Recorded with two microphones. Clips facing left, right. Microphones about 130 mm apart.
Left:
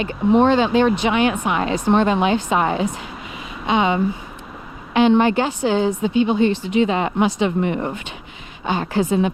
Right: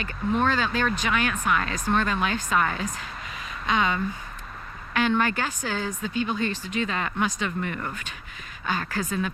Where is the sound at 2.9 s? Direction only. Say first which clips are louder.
Left 5 dB; 15° left (ahead or behind).